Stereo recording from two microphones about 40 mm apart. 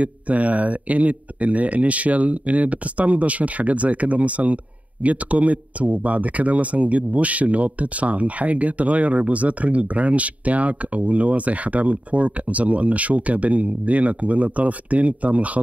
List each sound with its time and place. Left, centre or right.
0.0 s speech: right